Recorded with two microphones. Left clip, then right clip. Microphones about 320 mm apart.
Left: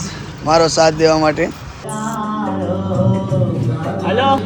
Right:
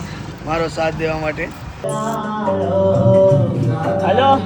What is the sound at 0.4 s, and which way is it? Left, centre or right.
Speech, centre.